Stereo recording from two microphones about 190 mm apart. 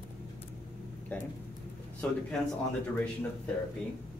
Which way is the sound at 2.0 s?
10° left (ahead or behind).